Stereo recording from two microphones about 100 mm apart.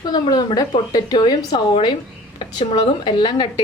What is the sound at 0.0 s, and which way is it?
A woman's voice, 40° left (ahead or behind).